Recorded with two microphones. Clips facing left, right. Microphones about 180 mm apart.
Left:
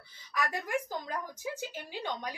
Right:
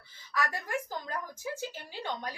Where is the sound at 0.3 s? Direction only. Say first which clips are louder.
Left 1 dB; 15° left (ahead or behind).